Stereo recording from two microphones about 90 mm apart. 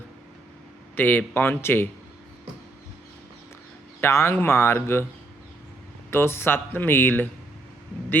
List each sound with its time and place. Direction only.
0.9 s speech: 20° left (ahead or behind)
4.0 s speech: 30° left (ahead or behind)
6.1 s speech: 25° left (ahead or behind)